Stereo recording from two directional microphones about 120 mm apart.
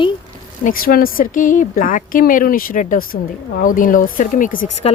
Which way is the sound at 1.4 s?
90° left.